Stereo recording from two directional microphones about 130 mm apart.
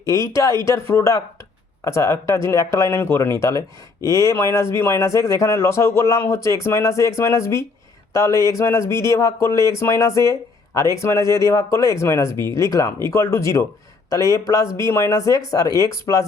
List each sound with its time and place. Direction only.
0.3 s speech: 25° left (ahead or behind)